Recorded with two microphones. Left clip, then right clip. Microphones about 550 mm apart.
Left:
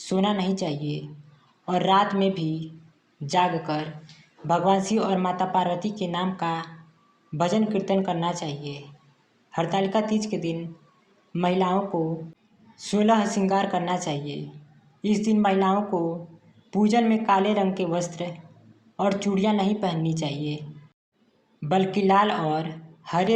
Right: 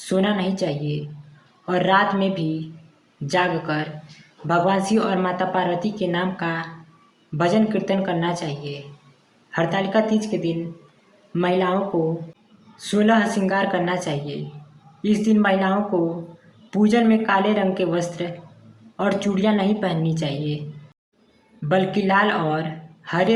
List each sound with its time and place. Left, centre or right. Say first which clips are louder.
0.0 s a woman's voice: right 3 dB; right
12.8 s a woman's voice: right 3 dB; right
16.7 s a woman's voice: right 3 dB; right
21.7 s a woman's voice: right 2 dB; right